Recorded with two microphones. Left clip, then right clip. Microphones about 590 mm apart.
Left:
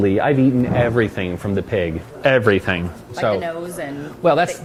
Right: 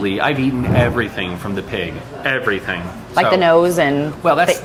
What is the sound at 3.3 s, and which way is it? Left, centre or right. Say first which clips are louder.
Speech: right 13 dB; right.